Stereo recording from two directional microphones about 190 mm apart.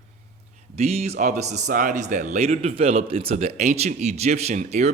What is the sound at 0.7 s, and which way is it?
A man's voice, 35° right (ahead or behind).